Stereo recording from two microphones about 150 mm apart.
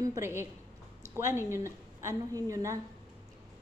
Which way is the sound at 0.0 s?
20° right (ahead or behind).